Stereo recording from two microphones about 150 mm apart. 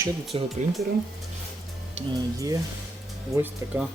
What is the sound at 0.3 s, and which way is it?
Speech, 35° right (ahead or behind).